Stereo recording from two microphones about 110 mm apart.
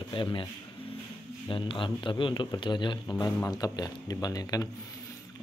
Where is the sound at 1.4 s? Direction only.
50° left (ahead or behind).